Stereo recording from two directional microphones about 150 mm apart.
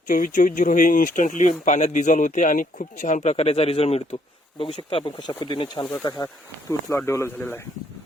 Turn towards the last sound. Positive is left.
turn(degrees=15)  # may be behind; listen again after turning